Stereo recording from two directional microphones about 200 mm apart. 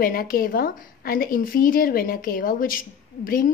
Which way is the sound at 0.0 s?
45° left (ahead or behind).